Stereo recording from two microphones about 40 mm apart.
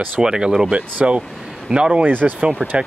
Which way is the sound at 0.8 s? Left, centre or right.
Right.